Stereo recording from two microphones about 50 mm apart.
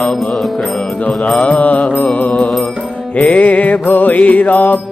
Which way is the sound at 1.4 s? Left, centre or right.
Left.